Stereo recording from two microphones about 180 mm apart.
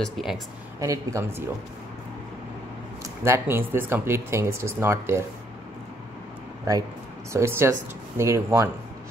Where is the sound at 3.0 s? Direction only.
15° right (ahead or behind).